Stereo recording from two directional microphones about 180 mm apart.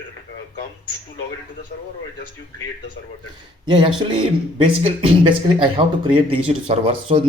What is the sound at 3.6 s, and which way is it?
Speech, 25° right (ahead or behind).